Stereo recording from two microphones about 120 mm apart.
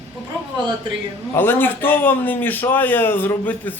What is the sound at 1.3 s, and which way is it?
A man's voice, 20° left (ahead or behind).